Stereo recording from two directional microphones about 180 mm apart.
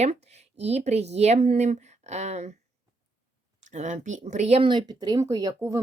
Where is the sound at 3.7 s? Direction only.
40° right (ahead or behind); by 5.8 s 20° right (ahead or behind).